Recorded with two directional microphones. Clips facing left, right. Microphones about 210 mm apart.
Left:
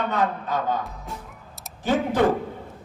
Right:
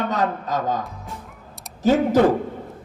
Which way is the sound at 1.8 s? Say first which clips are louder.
Right 5 dB; 40° right (ahead or behind).